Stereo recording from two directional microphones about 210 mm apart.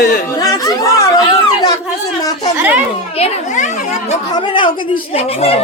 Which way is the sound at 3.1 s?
30° left (ahead or behind).